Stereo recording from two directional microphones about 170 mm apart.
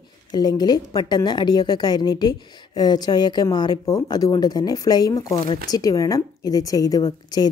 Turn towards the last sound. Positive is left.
turn(degrees=25)  # may be behind; listen again after turning